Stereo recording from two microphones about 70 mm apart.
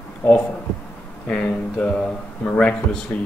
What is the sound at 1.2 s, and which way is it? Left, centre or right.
Speech, centre.